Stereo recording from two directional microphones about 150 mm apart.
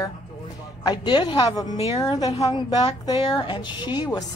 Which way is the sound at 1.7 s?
45° left (ahead or behind).